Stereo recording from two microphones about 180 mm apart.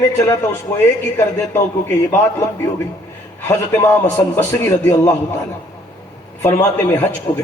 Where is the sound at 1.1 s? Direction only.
15° left (ahead or behind).